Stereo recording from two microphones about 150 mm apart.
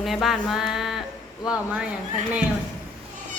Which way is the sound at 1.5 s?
5° right (ahead or behind).